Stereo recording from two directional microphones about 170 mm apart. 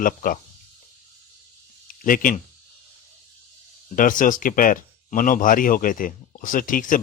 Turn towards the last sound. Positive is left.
turn(degrees=50)  # may be behind; listen again after turning